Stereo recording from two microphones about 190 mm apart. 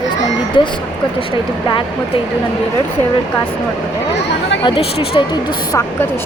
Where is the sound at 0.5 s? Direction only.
25° left (ahead or behind).